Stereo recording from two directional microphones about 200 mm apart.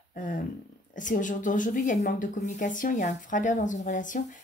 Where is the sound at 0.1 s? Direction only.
40° left (ahead or behind).